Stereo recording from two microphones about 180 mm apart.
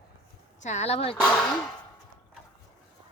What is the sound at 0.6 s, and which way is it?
Speech, 40° left (ahead or behind).